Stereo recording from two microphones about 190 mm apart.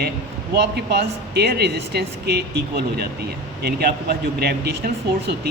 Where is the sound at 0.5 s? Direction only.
60° right (ahead or behind).